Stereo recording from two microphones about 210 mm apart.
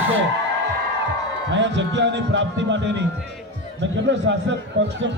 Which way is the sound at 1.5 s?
60° right (ahead or behind).